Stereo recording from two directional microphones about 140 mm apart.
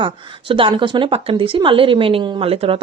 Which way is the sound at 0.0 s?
40° right (ahead or behind).